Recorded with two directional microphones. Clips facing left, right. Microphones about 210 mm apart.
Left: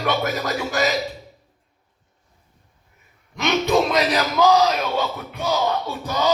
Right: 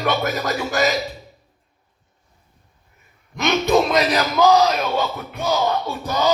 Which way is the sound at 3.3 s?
45° right (ahead or behind).